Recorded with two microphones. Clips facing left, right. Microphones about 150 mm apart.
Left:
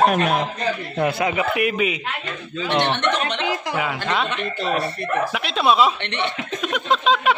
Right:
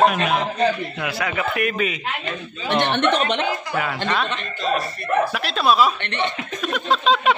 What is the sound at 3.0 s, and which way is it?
Speech, 55° right (ahead or behind).